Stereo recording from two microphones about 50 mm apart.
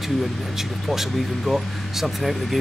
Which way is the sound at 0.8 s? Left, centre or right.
Centre.